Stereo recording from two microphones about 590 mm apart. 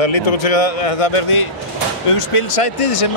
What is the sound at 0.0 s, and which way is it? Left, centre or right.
Speech, left.